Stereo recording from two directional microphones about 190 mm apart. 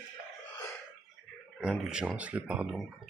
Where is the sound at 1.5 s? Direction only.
5° right (ahead or behind).